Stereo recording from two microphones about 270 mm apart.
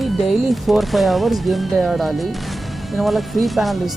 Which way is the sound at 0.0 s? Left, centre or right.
Centre.